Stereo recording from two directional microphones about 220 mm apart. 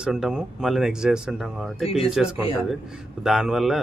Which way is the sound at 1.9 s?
25° left (ahead or behind).